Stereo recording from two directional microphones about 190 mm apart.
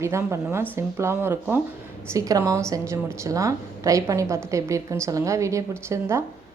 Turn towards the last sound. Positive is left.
turn(degrees=-15)  # may be behind; listen again after turning